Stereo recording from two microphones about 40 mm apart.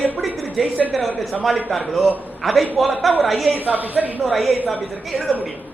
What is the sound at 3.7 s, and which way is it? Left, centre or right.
Speech, right.